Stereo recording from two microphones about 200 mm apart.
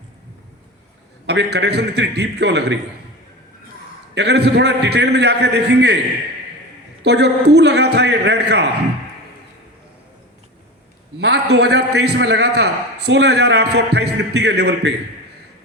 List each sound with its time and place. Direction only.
1.3 s a man's voice: 55° right (ahead or behind)
4.1 s a man's voice: 55° right (ahead or behind)
7.0 s a man's voice: 55° right (ahead or behind)
11.2 s a man's voice: 55° right (ahead or behind)